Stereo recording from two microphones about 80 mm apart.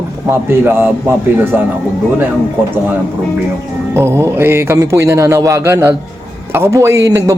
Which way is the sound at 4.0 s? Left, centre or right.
Right.